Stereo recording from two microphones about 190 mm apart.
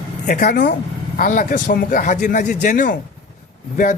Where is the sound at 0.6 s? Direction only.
55° left (ahead or behind).